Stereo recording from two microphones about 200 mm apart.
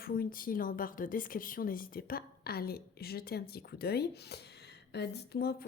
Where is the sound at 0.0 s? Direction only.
45° left (ahead or behind).